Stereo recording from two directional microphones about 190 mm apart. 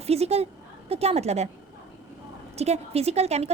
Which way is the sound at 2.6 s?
35° right (ahead or behind).